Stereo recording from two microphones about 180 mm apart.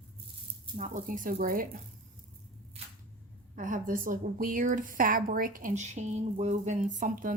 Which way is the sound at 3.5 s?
45° right (ahead or behind).